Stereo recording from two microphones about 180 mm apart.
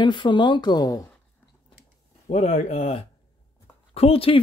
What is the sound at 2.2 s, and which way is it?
Speech, 40° left (ahead or behind).